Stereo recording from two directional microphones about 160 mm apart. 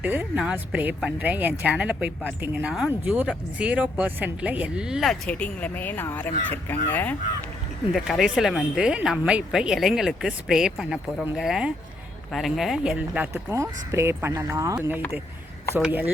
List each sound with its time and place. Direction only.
0.0 s speech: 10° right (ahead or behind); by 7.2 s 10° left (ahead or behind)
7.9 s speech: centre (ahead or behind)
13.3 s speech: 15° right (ahead or behind)